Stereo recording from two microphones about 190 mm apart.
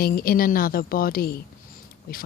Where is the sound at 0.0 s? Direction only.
50° left (ahead or behind).